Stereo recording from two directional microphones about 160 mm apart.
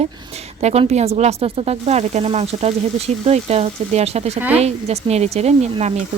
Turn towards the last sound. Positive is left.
turn(degrees=-45)  # may be behind; listen again after turning